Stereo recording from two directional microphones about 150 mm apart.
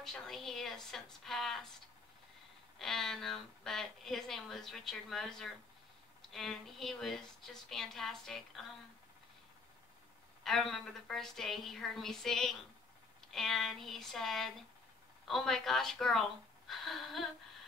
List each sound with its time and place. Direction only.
0.0 s a woman's voice: centre (ahead or behind)
2.8 s a woman's voice: 5° left (ahead or behind)
10.4 s a woman's voice: centre (ahead or behind)